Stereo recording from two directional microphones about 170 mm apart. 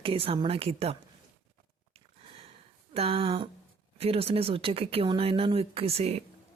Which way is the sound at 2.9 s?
35° right (ahead or behind).